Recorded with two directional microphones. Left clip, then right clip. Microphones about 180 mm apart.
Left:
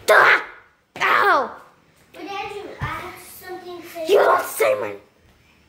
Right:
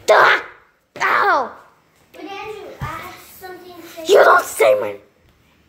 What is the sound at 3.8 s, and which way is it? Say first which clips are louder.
A child's voice: right 5 dB; 20° right (ahead or behind).